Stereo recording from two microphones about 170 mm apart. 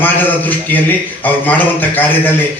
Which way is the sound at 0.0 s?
10° left (ahead or behind).